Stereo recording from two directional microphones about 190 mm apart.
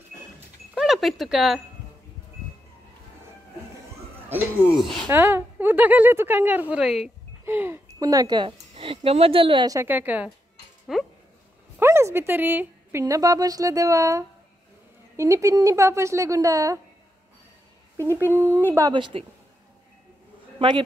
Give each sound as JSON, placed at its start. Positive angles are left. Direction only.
{"t": 0.7, "sound": "speech", "side_deg": 0}
{"t": 4.3, "sound": "a woman's voice", "side_deg": -10}
{"t": 11.8, "sound": "a sound", "side_deg": -15}
{"t": 13.0, "sound": "a woman's voice", "side_deg": -20}
{"t": 17.9, "sound": "a woman's voice", "side_deg": -15}
{"t": 20.5, "sound": "a man's voice", "side_deg": -25}